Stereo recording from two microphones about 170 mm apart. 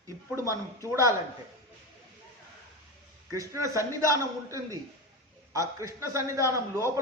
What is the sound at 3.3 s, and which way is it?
A man's voice, 20° right (ahead or behind).